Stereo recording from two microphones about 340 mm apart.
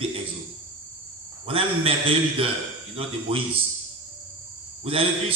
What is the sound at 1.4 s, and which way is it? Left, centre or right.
Speech, centre.